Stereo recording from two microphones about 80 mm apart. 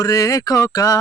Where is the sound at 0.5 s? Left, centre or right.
Left.